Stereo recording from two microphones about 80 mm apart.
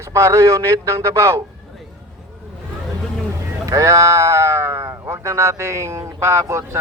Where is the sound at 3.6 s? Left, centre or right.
Right.